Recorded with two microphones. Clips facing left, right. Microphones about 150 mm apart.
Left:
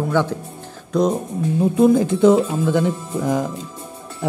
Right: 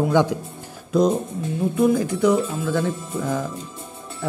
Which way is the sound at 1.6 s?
25° left (ahead or behind).